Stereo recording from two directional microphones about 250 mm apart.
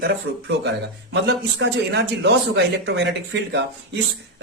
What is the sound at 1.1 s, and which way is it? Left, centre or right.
A man's voice, right.